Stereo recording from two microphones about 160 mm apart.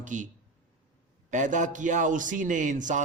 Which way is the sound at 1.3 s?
50° right (ahead or behind).